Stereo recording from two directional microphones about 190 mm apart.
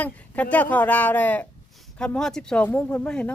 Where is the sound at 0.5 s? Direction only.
10° left (ahead or behind).